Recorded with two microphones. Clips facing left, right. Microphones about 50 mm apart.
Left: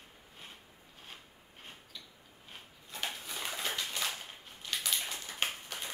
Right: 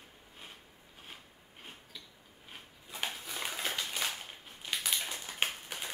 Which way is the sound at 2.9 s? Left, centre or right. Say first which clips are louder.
Right 1 dB; centre.